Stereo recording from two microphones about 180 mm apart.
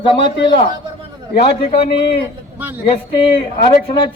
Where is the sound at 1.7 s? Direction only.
35° left (ahead or behind).